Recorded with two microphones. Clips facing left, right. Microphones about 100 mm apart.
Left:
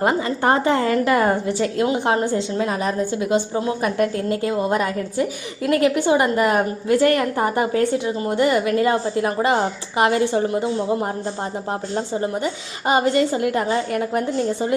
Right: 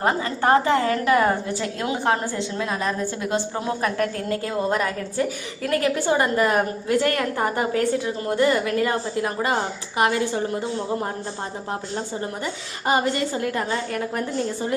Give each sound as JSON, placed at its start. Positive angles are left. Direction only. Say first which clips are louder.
{"t": 0.4, "sound": "a woman's voice", "louder": "even", "side_deg": 25}
{"t": 3.8, "sound": "a woman's voice", "louder": "left 3 dB", "side_deg": 20}
{"t": 12.9, "sound": "a woman's voice", "louder": "left 4 dB", "side_deg": 20}